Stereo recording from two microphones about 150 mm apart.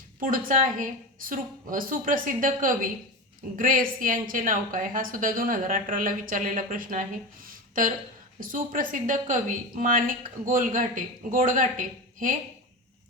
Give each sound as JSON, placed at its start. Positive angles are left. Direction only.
{"t": 0.2, "sound": "a woman's voice", "side_deg": -65}
{"t": 8.4, "sound": "a woman's voice", "side_deg": -65}